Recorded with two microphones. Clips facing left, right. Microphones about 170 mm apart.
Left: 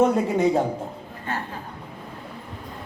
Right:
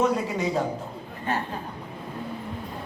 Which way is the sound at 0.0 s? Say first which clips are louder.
Left 5 dB; 55° left (ahead or behind).